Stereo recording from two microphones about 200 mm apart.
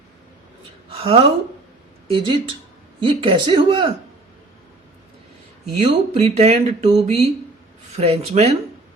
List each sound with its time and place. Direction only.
0.9 s speech: 30° right (ahead or behind)
5.8 s speech: 30° right (ahead or behind)